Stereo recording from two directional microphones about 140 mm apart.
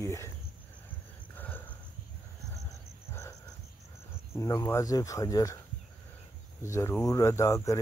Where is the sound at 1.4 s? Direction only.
15° left (ahead or behind).